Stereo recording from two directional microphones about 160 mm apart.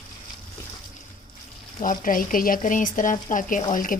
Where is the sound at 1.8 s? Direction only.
55° left (ahead or behind).